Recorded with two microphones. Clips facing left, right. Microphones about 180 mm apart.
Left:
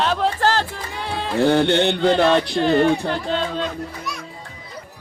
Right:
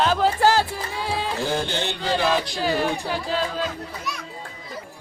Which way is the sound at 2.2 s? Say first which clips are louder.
Left 6 dB; 5° right (ahead or behind).